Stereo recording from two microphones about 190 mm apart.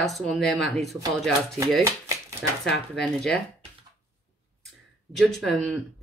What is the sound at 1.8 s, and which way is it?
Speech, 15° right (ahead or behind).